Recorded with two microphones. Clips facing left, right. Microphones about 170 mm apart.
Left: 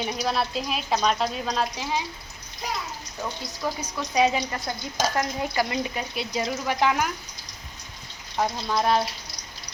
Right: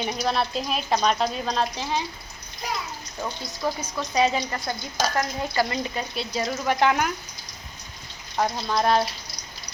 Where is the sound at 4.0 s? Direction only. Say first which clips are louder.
Left 1 dB; 10° left (ahead or behind).